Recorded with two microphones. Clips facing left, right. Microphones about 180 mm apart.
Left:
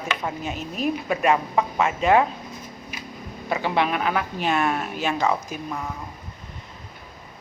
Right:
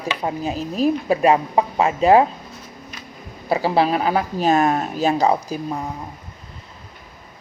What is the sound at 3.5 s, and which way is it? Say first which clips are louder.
A woman's voice: right 5 dB; 35° right (ahead or behind).